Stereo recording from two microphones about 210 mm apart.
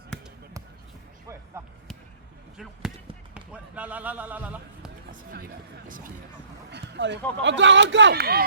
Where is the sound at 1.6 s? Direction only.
10° right (ahead or behind).